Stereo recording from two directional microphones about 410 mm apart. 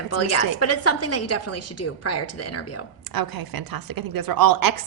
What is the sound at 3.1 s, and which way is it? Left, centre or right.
A woman's voice, right.